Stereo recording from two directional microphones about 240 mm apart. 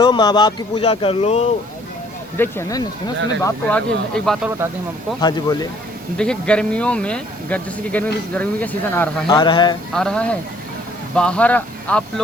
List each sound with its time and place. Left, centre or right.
0.0 s speech: centre
2.4 s speech: centre
5.2 s speech: centre
6.1 s speech: centre
9.2 s speech: centre
9.9 s speech: centre